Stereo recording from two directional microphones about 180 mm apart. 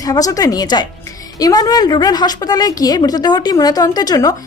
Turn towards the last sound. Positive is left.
turn(degrees=20)  # may be behind; listen again after turning